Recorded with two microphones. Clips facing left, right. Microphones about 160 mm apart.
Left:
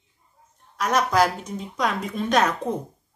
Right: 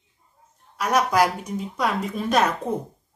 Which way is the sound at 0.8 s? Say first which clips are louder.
Even; 10° right (ahead or behind).